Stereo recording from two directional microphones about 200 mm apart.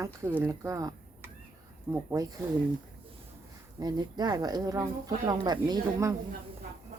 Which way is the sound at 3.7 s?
20° right (ahead or behind).